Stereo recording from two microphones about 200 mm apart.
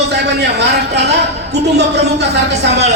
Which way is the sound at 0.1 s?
55° right (ahead or behind).